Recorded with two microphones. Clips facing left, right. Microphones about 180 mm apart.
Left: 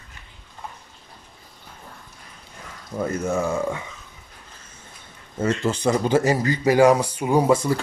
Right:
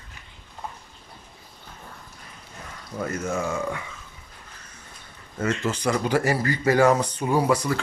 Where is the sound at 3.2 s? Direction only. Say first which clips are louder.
Left 4 dB; 35° left (ahead or behind).